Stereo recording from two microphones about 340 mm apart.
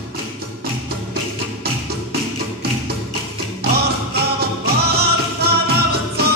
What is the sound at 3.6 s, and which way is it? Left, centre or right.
Music, right.